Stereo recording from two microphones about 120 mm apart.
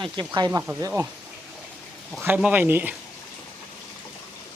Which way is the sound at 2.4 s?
15° right (ahead or behind).